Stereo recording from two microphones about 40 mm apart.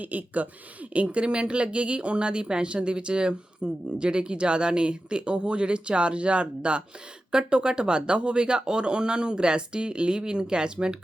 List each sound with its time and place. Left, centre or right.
0.0 s speech: right